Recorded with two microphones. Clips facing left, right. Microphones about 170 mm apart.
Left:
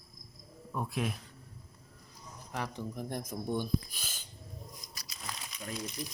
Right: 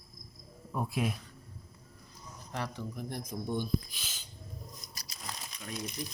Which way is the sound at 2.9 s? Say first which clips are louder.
Left 1 dB; 50° left (ahead or behind).